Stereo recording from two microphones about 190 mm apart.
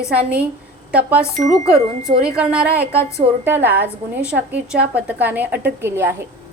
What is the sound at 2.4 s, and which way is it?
A woman's voice, 5° right (ahead or behind).